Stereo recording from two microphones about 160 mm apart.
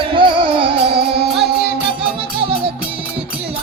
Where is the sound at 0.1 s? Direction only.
35° right (ahead or behind).